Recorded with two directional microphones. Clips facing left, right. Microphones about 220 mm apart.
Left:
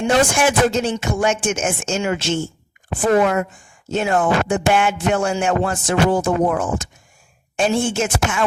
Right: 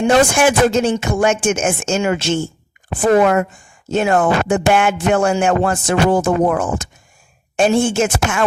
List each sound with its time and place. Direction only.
0.0 s a woman's voice: 50° right (ahead or behind)